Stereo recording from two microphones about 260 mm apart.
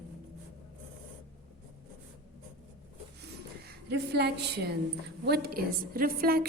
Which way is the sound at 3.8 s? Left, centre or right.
Right.